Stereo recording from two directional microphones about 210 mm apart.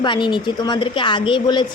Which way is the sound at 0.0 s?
20° left (ahead or behind).